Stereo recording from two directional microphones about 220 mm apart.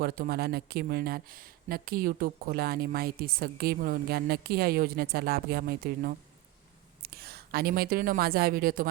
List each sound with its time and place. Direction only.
0.0 s a woman's voice: 45° right (ahead or behind)